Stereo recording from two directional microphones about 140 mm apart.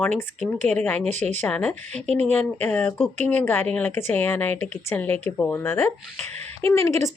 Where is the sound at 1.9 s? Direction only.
50° right (ahead or behind).